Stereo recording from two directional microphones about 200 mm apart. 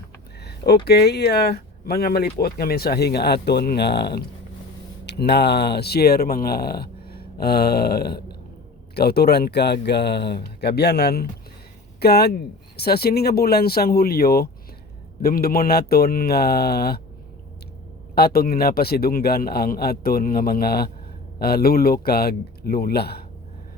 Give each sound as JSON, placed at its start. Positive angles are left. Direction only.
{"t": 0.4, "sound": "a sound", "side_deg": 50}
{"t": 0.9, "sound": "speech", "side_deg": 55}
{"t": 18.1, "sound": "speech", "side_deg": 50}